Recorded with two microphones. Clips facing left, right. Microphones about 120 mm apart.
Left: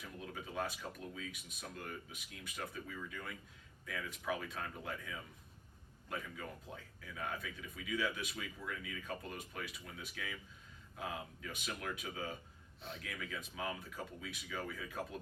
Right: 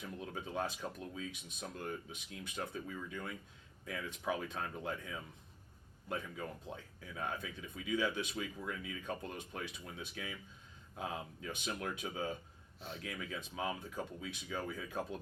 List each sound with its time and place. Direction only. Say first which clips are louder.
0.3 s speech: right 2 dB; 30° right (ahead or behind)